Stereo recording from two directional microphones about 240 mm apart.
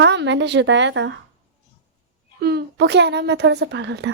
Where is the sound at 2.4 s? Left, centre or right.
Right.